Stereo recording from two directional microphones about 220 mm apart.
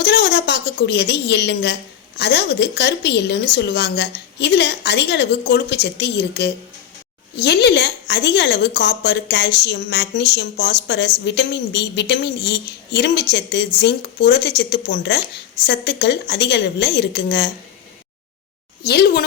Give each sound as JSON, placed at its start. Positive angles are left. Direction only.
{"t": 0.0, "sound": "a woman's voice", "side_deg": 50}
{"t": 18.8, "sound": "a woman's voice", "side_deg": 45}